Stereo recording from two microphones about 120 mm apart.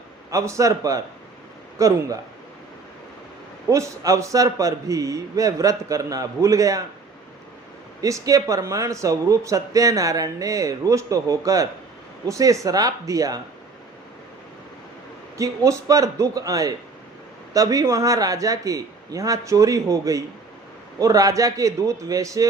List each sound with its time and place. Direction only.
0.3 s speech: 25° right (ahead or behind)
3.7 s speech: 25° right (ahead or behind)
8.0 s speech: 30° right (ahead or behind)
15.4 s speech: 30° right (ahead or behind)